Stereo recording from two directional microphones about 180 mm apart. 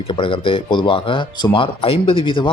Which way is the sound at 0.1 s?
30° left (ahead or behind).